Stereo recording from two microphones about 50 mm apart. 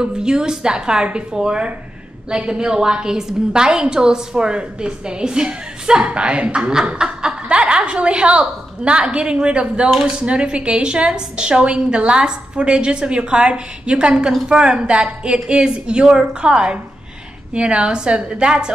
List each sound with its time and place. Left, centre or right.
0.0 s a woman's voice: centre
6.7 s a woman's voice: centre